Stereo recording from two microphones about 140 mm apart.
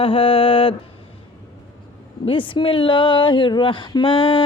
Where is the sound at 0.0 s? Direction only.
40° left (ahead or behind).